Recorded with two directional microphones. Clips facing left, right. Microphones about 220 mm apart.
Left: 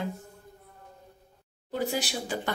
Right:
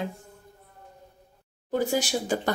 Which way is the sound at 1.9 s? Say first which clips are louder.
Right 5 dB; 45° right (ahead or behind).